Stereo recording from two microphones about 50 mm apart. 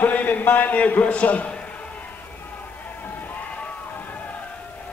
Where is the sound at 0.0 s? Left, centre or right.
Left.